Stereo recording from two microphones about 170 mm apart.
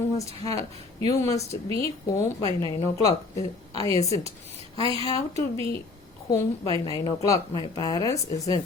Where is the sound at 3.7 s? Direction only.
20° left (ahead or behind).